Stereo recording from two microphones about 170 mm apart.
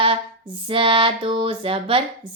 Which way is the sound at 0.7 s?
30° right (ahead or behind).